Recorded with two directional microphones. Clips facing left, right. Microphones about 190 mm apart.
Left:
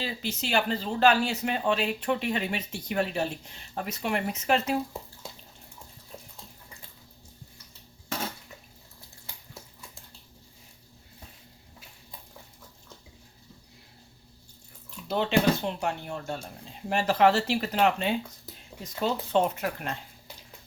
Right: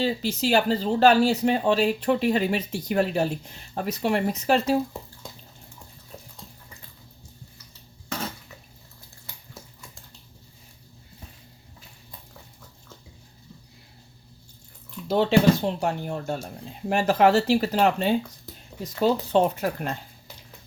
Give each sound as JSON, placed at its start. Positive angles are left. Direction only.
{"t": 0.0, "sound": "speech", "side_deg": -35}
{"t": 15.0, "sound": "speech", "side_deg": -40}